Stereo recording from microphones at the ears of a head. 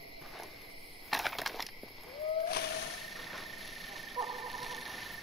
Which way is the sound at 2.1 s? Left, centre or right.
Left.